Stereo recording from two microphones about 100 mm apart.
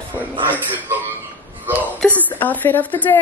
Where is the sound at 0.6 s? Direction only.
15° right (ahead or behind).